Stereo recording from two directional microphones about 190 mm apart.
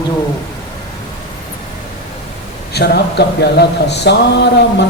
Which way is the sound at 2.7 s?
60° left (ahead or behind).